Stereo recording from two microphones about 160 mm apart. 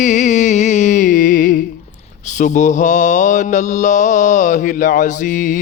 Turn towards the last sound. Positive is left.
turn(degrees=55)  # may be behind; listen again after turning